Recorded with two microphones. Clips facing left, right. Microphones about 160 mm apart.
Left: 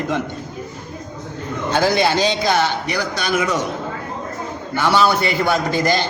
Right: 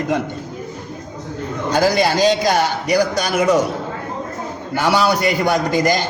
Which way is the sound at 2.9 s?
40° right (ahead or behind).